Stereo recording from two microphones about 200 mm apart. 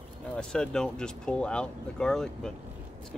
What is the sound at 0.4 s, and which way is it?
Speech, 5° left (ahead or behind).